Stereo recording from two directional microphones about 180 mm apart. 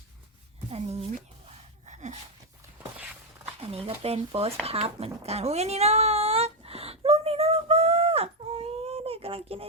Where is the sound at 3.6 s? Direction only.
30° right (ahead or behind).